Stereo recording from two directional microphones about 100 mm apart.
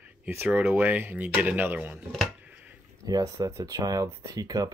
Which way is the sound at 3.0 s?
35° right (ahead or behind).